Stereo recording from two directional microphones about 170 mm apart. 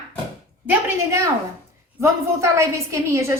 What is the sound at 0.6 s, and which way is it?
A woman's voice, 15° right (ahead or behind).